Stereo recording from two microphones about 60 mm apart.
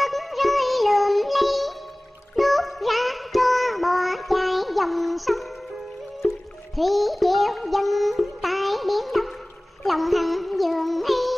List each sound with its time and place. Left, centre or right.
0.0 s music: centre
9.8 s child singing: centre